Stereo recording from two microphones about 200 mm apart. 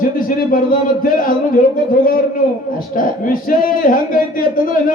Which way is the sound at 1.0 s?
45° left (ahead or behind).